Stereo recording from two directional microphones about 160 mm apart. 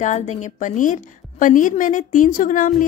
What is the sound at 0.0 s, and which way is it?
A woman's voice, 45° left (ahead or behind).